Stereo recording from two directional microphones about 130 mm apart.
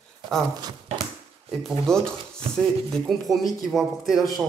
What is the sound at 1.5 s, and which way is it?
A man's voice, 5° left (ahead or behind).